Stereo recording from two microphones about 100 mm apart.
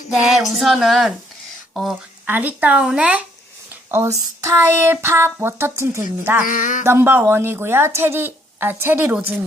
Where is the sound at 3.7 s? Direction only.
25° right (ahead or behind).